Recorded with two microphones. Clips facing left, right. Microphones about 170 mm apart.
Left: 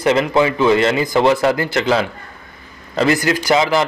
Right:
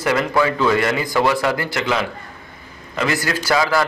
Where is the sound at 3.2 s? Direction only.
20° left (ahead or behind).